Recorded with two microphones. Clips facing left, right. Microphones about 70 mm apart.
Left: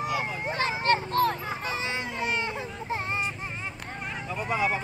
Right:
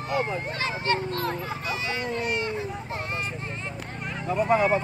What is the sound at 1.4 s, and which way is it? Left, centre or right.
Vehicle, left.